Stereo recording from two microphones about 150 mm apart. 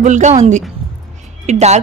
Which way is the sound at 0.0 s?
50° right (ahead or behind).